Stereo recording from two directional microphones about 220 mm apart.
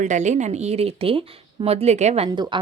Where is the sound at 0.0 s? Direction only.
35° right (ahead or behind).